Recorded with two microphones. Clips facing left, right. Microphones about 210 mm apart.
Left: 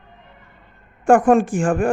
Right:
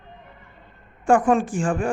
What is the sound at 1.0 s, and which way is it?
Speech, 50° left (ahead or behind).